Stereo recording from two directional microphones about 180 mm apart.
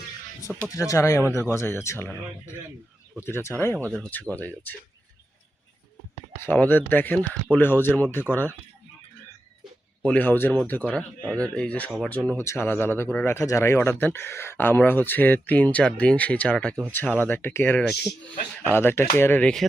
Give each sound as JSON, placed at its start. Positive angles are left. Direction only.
{"t": 0.4, "sound": "speech", "side_deg": 20}
{"t": 3.2, "sound": "speech", "side_deg": 15}
{"t": 3.8, "sound": "speech", "side_deg": 5}
{"t": 6.4, "sound": "speech", "side_deg": 10}
{"t": 10.0, "sound": "speech", "side_deg": 10}